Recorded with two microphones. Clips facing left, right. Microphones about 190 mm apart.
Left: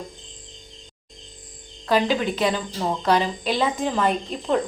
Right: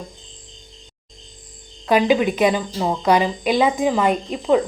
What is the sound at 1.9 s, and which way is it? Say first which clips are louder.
Speech: right 5 dB; 15° right (ahead or behind).